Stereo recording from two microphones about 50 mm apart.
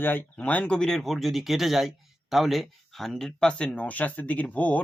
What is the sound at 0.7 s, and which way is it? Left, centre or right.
Speech, centre.